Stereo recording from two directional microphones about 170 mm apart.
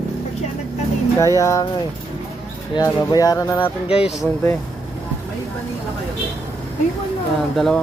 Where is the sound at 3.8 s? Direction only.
35° left (ahead or behind).